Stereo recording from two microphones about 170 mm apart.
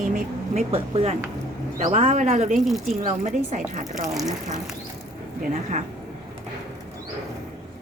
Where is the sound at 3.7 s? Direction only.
45° right (ahead or behind).